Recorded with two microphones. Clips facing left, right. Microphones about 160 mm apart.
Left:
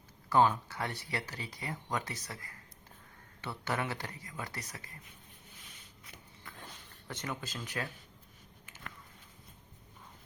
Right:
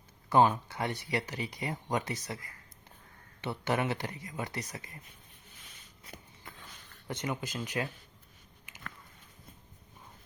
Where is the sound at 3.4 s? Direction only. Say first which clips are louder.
Right 5 dB; 20° right (ahead or behind).